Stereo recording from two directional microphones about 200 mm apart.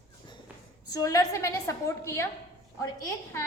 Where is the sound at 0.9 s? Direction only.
15° left (ahead or behind).